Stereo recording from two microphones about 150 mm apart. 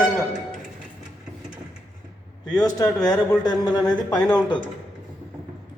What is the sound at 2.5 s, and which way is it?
Speech, 25° left (ahead or behind).